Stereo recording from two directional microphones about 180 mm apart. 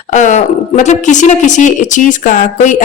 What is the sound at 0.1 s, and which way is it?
A woman's voice, 40° left (ahead or behind).